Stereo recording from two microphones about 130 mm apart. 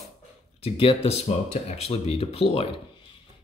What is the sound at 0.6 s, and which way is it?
Speech, 50° left (ahead or behind).